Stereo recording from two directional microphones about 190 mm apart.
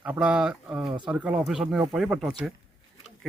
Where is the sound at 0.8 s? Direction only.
25° right (ahead or behind).